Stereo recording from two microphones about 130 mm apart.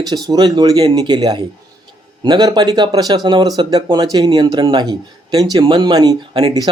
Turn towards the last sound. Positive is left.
turn(degrees=-30)  # may be behind; listen again after turning